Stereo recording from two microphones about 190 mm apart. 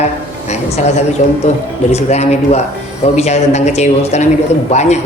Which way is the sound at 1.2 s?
40° left (ahead or behind).